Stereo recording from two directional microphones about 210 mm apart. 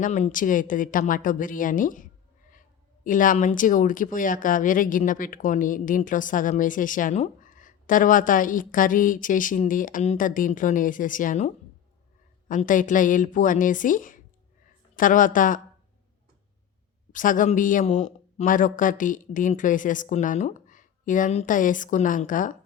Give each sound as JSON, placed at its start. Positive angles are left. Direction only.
{"t": 0.0, "sound": "speech", "side_deg": 35}
{"t": 17.1, "sound": "speech", "side_deg": 40}